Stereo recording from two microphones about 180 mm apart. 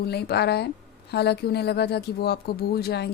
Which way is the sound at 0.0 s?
65° left (ahead or behind).